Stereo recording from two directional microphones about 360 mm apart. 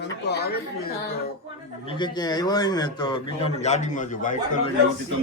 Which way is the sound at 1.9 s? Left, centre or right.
Centre.